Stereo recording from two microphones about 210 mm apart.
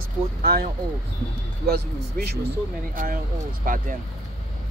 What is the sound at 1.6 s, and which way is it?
Speech, 50° right (ahead or behind).